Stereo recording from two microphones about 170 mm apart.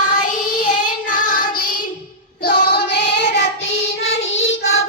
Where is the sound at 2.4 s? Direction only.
75° left (ahead or behind).